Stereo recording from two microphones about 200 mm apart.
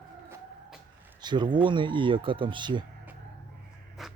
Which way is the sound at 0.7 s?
10° right (ahead or behind).